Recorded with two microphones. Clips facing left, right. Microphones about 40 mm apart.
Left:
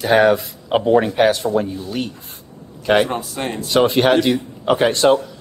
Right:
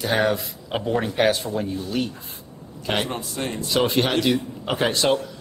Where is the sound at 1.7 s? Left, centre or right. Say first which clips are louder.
Left 1 dB; centre.